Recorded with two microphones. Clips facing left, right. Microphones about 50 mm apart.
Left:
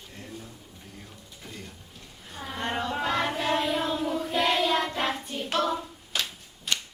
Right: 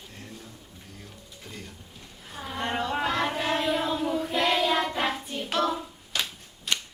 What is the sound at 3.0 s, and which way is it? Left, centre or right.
Child singing, centre.